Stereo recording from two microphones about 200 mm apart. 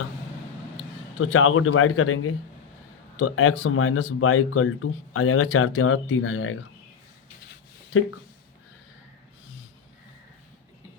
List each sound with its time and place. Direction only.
1.2 s speech: 90° left